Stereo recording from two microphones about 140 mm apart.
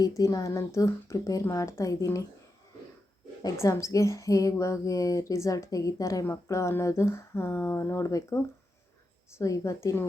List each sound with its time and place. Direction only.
0.0 s speech: 25° left (ahead or behind)
3.4 s speech: 20° left (ahead or behind)
9.4 s speech: 20° left (ahead or behind)